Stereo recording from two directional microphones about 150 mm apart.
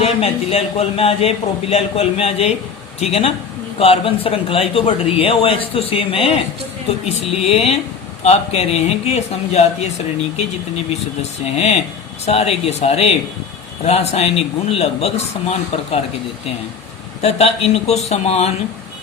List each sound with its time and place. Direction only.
0.0 s a man's voice: 40° left (ahead or behind)
11.2 s a man's voice: 45° left (ahead or behind)
17.2 s a man's voice: 45° left (ahead or behind)